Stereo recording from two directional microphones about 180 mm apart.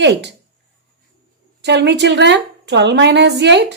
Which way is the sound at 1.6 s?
70° right (ahead or behind).